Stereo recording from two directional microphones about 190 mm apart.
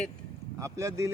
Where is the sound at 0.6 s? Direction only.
15° right (ahead or behind).